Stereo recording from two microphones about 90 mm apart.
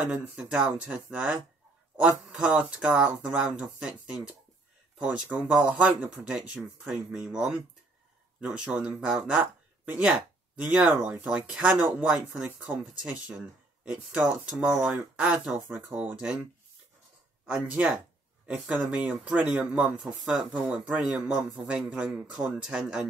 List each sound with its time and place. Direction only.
0.0 s speech: 15° right (ahead or behind)
17.6 s speech: 10° right (ahead or behind)